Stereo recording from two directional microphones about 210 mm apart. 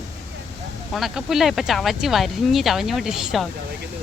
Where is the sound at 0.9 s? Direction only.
Centre (ahead or behind).